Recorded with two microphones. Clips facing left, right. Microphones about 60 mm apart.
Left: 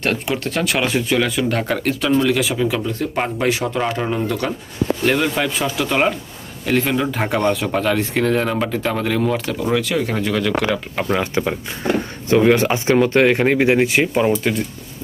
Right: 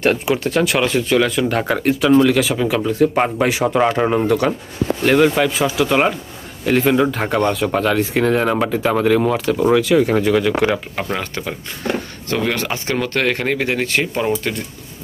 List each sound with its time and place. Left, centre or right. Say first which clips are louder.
0.0 s speech: right 4 dB; centre
1.6 s speech: right 3 dB; centre
3.6 s speech: right 5 dB; right
5.0 s speech: right 6 dB; centre
11.0 s speech: left 3 dB; centre
11.3 s speech: left 5 dB; centre